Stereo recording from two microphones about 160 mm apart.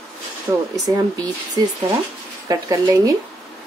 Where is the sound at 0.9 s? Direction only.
20° right (ahead or behind).